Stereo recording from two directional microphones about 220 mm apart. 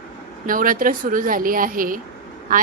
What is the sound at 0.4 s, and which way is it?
A woman's voice, 40° right (ahead or behind).